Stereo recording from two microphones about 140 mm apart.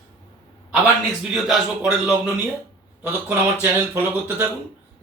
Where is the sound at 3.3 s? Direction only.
15° right (ahead or behind).